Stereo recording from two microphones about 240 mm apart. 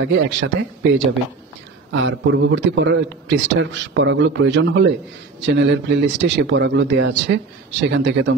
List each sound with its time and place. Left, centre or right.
0.0 s a man's voice: right